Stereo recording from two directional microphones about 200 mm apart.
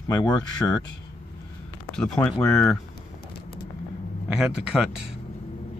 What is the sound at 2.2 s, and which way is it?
Speech, 5° left (ahead or behind).